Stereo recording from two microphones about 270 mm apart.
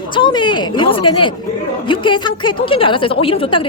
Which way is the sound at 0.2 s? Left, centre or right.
Centre.